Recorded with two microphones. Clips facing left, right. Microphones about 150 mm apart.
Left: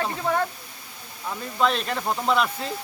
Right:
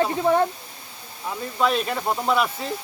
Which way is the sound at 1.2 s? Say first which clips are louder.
Right 1 dB; 5° right (ahead or behind).